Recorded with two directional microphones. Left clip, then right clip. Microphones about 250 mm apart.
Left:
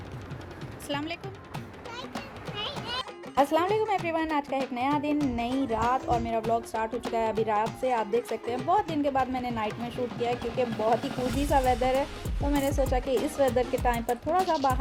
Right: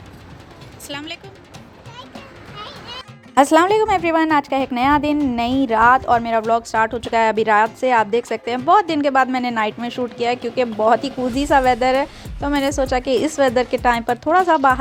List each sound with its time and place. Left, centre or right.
0.9 s speech: centre
3.3 s a woman's voice: right